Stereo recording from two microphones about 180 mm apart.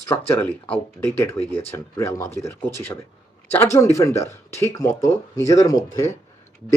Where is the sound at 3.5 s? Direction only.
15° left (ahead or behind).